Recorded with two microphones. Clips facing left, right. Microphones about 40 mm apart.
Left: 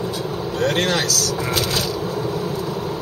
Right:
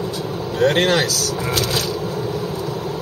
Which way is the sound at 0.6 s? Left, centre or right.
Centre.